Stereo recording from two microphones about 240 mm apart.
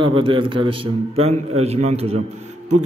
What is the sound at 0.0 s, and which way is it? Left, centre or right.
A man's voice, right.